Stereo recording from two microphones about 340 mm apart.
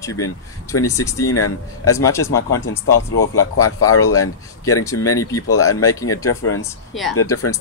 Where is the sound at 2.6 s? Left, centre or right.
Left.